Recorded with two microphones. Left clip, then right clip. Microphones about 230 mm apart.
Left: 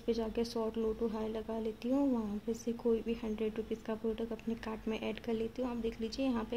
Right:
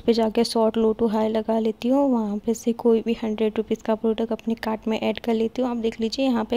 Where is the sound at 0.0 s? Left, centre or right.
Right.